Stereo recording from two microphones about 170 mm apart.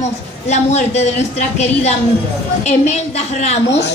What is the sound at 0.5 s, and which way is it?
A woman's voice, 40° left (ahead or behind).